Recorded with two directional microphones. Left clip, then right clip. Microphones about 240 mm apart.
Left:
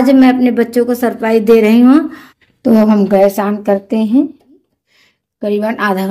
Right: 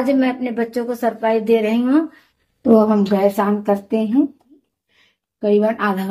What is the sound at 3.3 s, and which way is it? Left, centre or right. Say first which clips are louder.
Speech: left 4 dB; left.